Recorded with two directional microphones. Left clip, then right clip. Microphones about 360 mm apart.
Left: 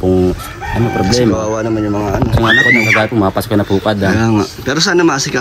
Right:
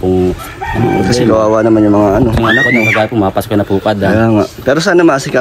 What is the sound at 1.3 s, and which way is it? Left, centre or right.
Speech, right.